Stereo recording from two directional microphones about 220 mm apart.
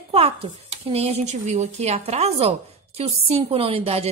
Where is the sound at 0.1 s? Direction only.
25° right (ahead or behind).